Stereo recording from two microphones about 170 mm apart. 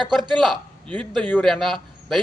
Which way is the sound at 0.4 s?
5° left (ahead or behind).